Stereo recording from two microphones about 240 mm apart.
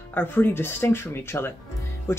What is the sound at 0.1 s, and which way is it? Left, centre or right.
Speech, centre.